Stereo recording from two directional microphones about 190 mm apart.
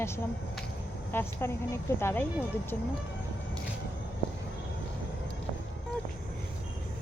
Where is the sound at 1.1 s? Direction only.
10° left (ahead or behind).